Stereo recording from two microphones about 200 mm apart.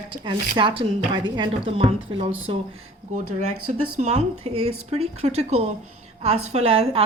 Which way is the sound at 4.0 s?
35° right (ahead or behind).